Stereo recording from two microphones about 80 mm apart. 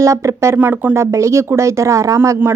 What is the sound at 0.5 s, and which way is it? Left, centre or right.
Speech, right.